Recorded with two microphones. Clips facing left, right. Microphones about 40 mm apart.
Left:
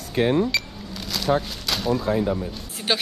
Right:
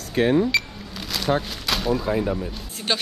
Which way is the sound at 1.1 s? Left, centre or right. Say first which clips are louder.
Left 1 dB; centre.